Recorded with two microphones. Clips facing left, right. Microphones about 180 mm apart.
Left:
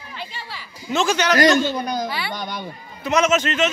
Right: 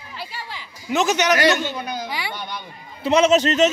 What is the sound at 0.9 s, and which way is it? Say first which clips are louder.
Speech: right 1 dB; 20° right (ahead or behind).